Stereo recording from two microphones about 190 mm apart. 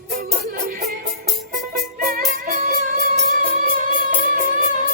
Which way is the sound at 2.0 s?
50° right (ahead or behind).